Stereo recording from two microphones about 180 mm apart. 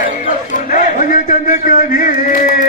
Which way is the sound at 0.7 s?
50° left (ahead or behind).